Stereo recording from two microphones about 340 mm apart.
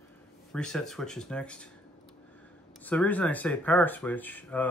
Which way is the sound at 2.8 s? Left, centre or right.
Centre.